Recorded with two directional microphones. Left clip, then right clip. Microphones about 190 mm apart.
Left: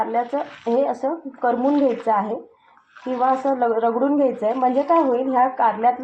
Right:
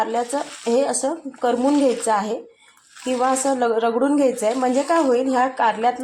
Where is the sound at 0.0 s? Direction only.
30° right (ahead or behind).